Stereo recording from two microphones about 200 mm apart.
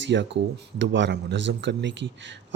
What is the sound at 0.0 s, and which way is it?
A man's voice, 60° right (ahead or behind).